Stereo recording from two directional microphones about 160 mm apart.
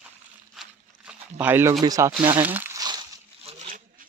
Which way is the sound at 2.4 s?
10° right (ahead or behind).